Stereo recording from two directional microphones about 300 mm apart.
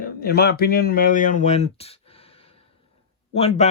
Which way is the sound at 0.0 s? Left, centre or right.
Left.